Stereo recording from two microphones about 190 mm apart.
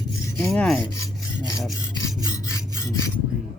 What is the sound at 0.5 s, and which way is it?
Rub, 5° left (ahead or behind).